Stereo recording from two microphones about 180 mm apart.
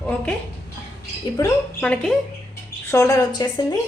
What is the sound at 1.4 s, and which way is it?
A woman's voice, 5° left (ahead or behind).